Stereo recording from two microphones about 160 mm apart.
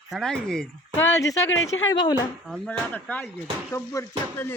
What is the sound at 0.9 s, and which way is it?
Speech, 20° left (ahead or behind).